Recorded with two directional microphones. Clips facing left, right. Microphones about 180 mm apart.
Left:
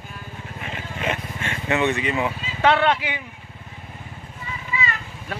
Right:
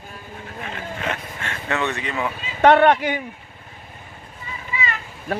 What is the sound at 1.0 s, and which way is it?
Speech, 10° left (ahead or behind).